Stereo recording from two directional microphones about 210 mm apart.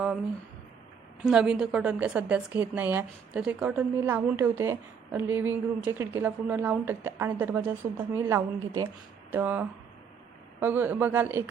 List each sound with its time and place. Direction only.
1.2 s a woman's voice: 5° right (ahead or behind)